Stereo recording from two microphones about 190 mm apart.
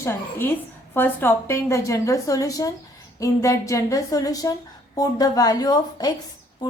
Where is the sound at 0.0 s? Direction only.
10° left (ahead or behind).